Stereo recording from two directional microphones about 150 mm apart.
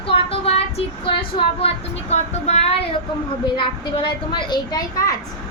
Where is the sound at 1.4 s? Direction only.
40° left (ahead or behind); by 5.1 s 25° left (ahead or behind).